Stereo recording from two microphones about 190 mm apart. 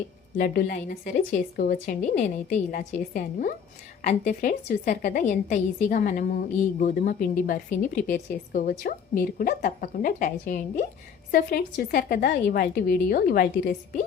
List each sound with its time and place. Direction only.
0.3 s a woman's voice: 50° left (ahead or behind)